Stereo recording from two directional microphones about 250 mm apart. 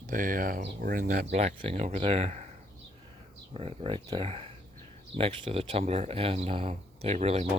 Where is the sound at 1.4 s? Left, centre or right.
Right.